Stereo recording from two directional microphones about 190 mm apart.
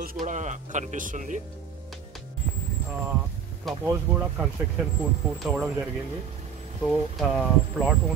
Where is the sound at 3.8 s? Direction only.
10° right (ahead or behind).